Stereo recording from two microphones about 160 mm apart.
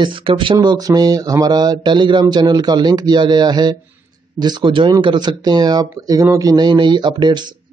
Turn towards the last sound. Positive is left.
turn(degrees=-30)  # may be behind; listen again after turning